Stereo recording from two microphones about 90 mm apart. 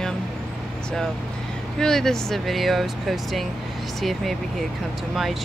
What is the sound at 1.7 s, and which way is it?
Speech, 5° left (ahead or behind).